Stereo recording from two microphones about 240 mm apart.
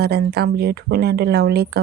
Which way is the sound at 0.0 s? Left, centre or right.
Right.